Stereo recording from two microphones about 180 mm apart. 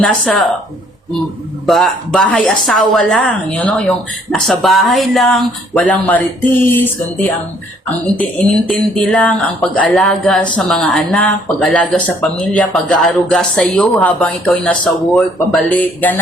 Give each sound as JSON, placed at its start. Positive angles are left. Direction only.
{"t": 0.0, "sound": "speech", "side_deg": 5}
{"t": 1.6, "sound": "speech", "side_deg": 0}